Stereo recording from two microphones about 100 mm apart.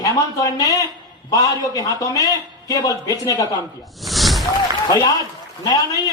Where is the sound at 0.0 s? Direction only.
35° left (ahead or behind).